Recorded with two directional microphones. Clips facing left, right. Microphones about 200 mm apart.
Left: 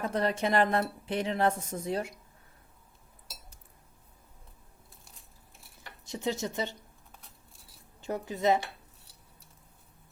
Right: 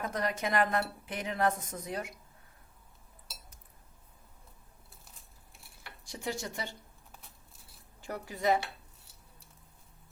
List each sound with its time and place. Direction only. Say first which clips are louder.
0.0 s speech: left 4 dB; 30° left (ahead or behind)
6.1 s speech: left 5 dB; 20° left (ahead or behind)
8.0 s speech: left 3 dB; 20° left (ahead or behind)